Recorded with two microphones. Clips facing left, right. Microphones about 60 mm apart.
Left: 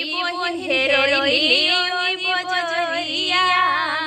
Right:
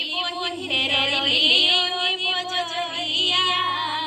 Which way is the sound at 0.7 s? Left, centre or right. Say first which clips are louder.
Left 7 dB; left.